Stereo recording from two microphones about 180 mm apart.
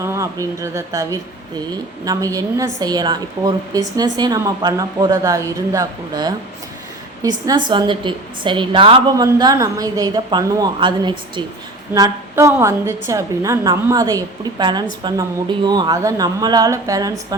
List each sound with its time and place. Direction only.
0.0 s a woman's voice: 15° right (ahead or behind)